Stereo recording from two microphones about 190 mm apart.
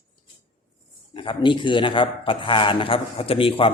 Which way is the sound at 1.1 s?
25° left (ahead or behind).